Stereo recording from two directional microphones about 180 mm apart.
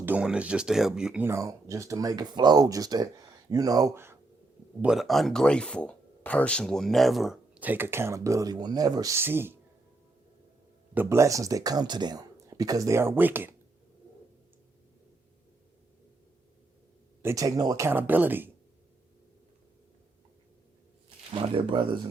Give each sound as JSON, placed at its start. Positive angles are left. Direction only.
{"t": 0.0, "sound": "speech", "side_deg": -5}
{"t": 4.8, "sound": "speech", "side_deg": 0}
{"t": 10.9, "sound": "speech", "side_deg": -15}
{"t": 17.2, "sound": "speech", "side_deg": -20}
{"t": 21.2, "sound": "speech", "side_deg": -30}